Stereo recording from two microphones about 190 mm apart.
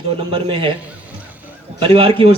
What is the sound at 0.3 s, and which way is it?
Speech, 25° right (ahead or behind).